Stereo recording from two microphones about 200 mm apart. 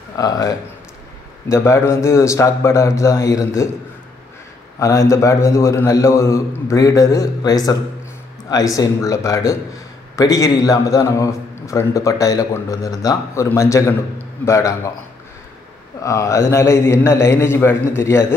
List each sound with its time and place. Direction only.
0.2 s a man's voice: 20° left (ahead or behind)
4.7 s a man's voice: 15° left (ahead or behind)
16.0 s a man's voice: 15° left (ahead or behind)